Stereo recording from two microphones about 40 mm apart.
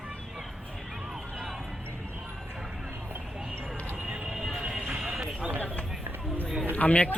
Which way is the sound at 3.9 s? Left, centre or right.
Right.